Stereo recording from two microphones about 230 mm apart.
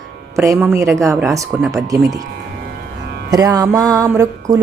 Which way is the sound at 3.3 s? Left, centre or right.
Centre.